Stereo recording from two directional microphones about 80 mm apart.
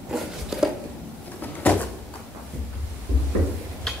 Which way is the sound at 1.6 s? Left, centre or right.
Centre.